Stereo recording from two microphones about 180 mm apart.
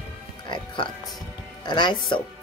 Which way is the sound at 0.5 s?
25° left (ahead or behind).